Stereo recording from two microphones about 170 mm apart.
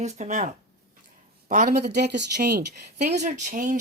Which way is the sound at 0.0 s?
40° right (ahead or behind).